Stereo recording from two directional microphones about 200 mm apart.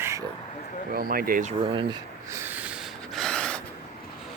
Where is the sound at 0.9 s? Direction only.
45° right (ahead or behind); by 2.0 s 25° right (ahead or behind).